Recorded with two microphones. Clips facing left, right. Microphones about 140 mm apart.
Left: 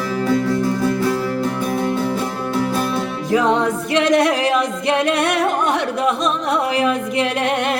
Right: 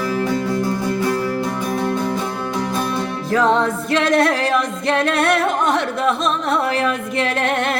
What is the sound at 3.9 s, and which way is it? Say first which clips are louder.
Singing: left 1 dB; 15° left (ahead or behind).